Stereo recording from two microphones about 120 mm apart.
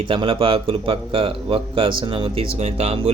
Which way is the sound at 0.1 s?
50° right (ahead or behind).